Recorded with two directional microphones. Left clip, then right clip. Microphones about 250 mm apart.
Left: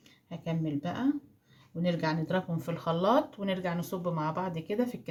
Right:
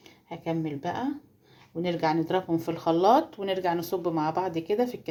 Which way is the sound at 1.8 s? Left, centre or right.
Right.